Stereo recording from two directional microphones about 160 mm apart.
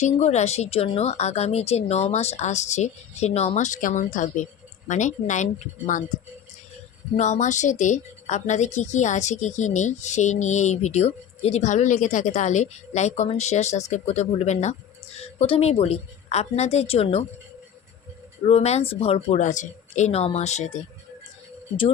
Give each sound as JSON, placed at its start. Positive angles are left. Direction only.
{"t": 0.0, "sound": "a woman's voice", "side_deg": 45}
{"t": 7.2, "sound": "a woman's voice", "side_deg": 45}
{"t": 18.4, "sound": "speech", "side_deg": 40}